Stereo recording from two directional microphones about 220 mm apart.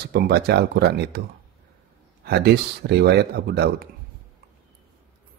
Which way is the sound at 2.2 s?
45° right (ahead or behind).